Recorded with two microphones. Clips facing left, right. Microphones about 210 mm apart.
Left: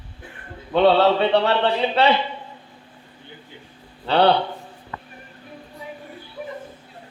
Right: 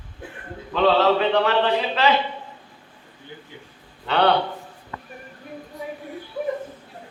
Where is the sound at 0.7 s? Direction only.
30° left (ahead or behind).